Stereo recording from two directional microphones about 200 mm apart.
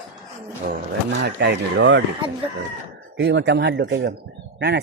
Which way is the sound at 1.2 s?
60° right (ahead or behind).